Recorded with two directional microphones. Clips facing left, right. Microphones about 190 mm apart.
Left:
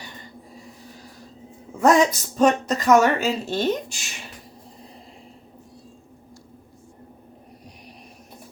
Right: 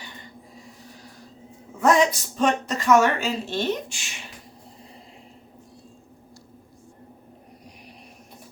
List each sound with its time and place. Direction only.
1.8 s speech: 40° left (ahead or behind)